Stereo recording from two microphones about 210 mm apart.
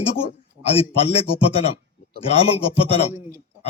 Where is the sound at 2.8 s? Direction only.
30° left (ahead or behind).